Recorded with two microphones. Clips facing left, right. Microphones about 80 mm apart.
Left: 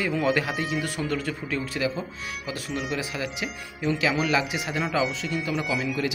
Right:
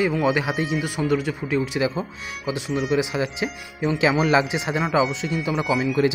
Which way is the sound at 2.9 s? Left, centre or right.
Right.